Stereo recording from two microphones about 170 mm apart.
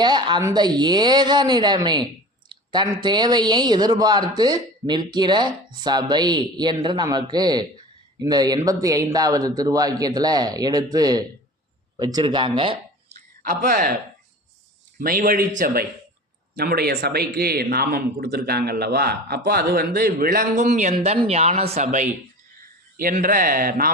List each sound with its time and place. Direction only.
0.0 s speech: 25° right (ahead or behind); by 13.9 s 55° right (ahead or behind)
14.9 s a man's voice: 55° right (ahead or behind)